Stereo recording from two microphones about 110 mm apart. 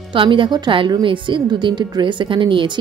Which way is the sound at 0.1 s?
50° right (ahead or behind).